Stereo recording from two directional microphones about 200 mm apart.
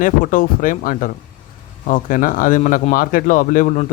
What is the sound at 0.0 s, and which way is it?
Speech, 40° left (ahead or behind).